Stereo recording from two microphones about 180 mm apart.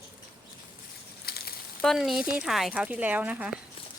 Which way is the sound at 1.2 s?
60° left (ahead or behind).